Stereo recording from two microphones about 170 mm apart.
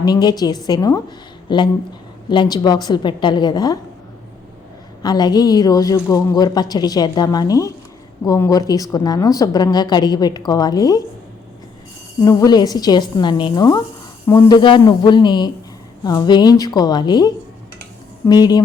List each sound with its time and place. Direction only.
0.0 s a woman's voice: 25° left (ahead or behind)
5.0 s a woman's voice: 25° left (ahead or behind)
12.2 s a woman's voice: 20° left (ahead or behind)